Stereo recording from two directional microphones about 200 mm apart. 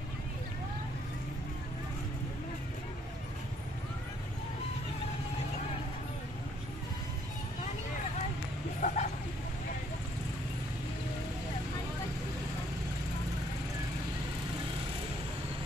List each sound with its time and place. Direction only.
8.8 s vehicle: 35° left (ahead or behind)